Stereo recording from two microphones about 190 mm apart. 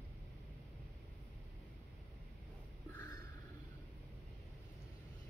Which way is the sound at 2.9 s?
15° left (ahead or behind).